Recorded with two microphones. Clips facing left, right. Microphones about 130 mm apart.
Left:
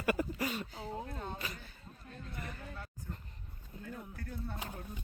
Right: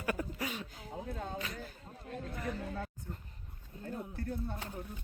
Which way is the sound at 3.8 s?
35° right (ahead or behind).